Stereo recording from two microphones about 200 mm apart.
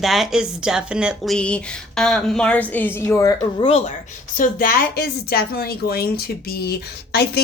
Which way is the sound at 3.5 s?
30° left (ahead or behind).